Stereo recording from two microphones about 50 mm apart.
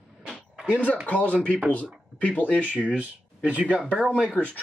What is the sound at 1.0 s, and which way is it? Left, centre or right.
Speech, left.